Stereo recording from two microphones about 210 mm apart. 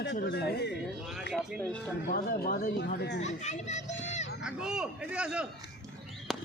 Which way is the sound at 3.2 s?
35° left (ahead or behind).